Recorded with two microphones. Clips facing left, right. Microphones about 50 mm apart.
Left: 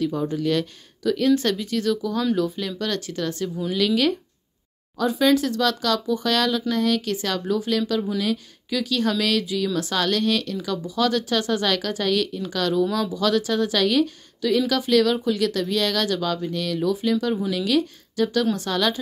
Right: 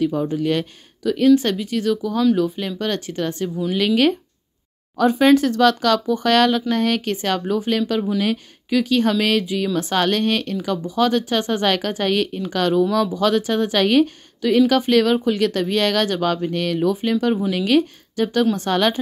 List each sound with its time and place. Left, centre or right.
0.0 s speech: centre; by 18.9 s right